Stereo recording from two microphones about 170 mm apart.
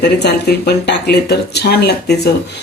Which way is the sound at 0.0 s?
70° left (ahead or behind).